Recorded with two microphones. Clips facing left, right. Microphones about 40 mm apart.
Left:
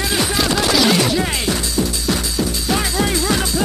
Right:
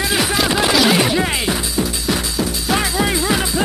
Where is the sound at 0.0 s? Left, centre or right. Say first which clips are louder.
Right 1 dB; centre.